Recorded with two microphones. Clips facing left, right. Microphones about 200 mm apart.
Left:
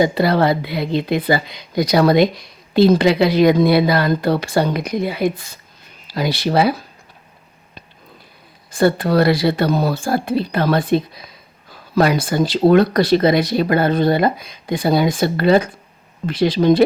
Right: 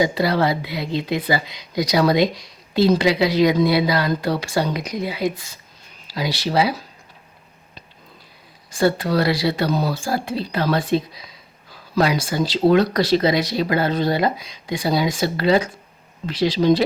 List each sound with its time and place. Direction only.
0.0 s speech: 55° left (ahead or behind)
8.7 s speech: 55° left (ahead or behind)